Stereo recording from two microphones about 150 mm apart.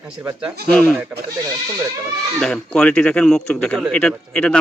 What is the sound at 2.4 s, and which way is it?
Speech, 5° left (ahead or behind).